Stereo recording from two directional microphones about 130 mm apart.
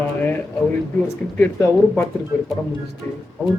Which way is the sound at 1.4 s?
15° left (ahead or behind).